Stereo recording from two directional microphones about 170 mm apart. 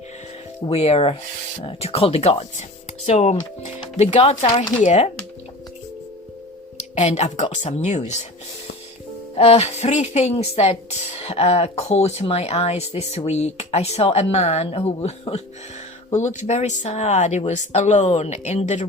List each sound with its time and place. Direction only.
0.7 s speech: 35° left (ahead or behind)
6.9 s speech: 40° left (ahead or behind)
9.4 s speech: 35° left (ahead or behind)